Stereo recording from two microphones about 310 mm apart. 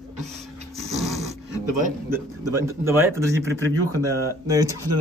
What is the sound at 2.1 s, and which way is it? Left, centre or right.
A man's voice, centre.